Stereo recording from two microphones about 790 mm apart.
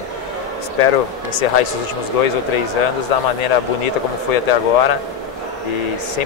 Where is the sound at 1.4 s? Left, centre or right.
Left.